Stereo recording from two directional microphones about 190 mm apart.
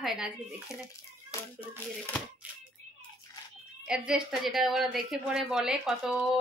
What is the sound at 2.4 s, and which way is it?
Hands, 10° right (ahead or behind).